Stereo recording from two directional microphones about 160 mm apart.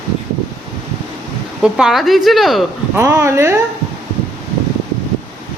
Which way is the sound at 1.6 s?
5° right (ahead or behind).